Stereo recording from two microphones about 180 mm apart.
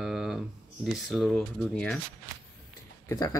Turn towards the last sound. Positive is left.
turn(degrees=15)  # may be behind; listen again after turning